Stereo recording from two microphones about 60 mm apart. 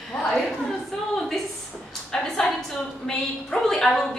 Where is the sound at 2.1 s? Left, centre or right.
Centre.